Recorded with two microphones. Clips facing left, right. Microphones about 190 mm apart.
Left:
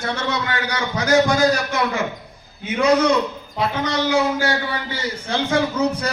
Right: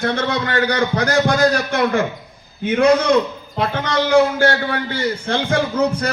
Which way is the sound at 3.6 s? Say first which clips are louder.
Right 2 dB; 55° right (ahead or behind).